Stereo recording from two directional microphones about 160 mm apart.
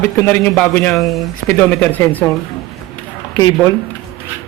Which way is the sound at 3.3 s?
20° left (ahead or behind).